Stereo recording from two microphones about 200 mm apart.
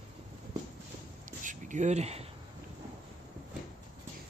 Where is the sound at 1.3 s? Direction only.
40° right (ahead or behind).